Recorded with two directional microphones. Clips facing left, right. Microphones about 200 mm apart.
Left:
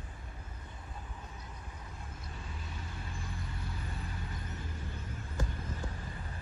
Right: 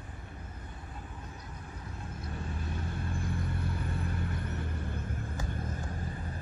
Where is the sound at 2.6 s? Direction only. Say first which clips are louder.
Right 8 dB; 55° right (ahead or behind).